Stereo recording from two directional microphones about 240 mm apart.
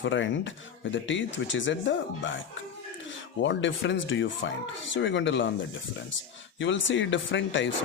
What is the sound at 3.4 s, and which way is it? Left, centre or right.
A man's voice, left.